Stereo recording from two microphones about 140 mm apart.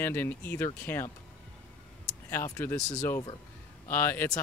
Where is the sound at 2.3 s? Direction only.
15° left (ahead or behind).